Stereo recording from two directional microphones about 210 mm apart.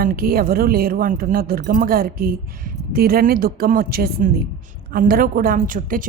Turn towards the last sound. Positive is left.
turn(degrees=-40)  # may be behind; listen again after turning